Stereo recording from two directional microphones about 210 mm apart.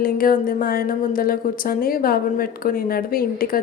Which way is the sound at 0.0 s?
45° left (ahead or behind).